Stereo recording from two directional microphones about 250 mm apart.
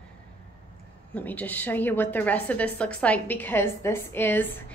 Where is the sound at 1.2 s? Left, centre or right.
Centre.